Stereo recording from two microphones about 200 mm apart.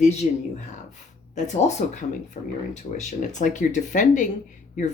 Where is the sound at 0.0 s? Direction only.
35° left (ahead or behind).